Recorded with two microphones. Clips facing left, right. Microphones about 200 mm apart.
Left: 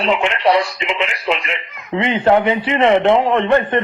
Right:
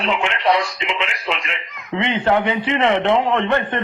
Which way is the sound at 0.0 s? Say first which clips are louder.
Left 4 dB; 35° left (ahead or behind).